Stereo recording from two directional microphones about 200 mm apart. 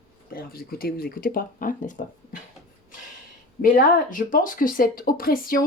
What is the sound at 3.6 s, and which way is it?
Speech, 45° left (ahead or behind).